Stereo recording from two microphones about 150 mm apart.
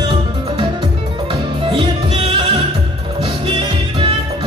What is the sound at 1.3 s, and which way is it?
Music, 35° right (ahead or behind).